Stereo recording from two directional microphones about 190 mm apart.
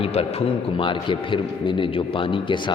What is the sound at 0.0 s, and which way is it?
A man's voice, 30° left (ahead or behind).